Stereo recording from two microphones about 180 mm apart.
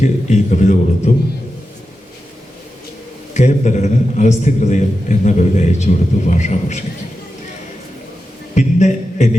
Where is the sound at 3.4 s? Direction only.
40° left (ahead or behind).